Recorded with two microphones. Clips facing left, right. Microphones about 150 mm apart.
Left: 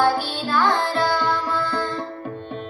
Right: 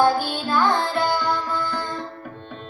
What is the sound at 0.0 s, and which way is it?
Music, 15° right (ahead or behind).